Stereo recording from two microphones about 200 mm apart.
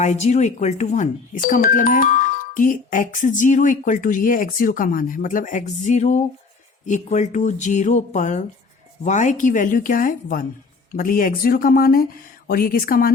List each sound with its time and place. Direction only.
0.0 s speech: 35° left (ahead or behind)